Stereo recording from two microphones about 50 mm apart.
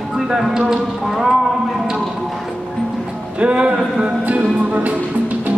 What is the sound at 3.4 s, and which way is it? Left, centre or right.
Music, right.